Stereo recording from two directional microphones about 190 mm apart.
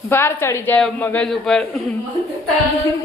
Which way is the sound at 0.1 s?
10° left (ahead or behind).